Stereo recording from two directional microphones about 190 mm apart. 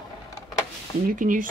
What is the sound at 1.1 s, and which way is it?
Speech, 45° right (ahead or behind).